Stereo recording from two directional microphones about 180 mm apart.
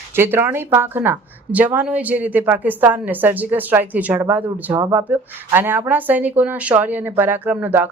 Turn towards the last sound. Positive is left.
turn(degrees=-10)  # may be behind; listen again after turning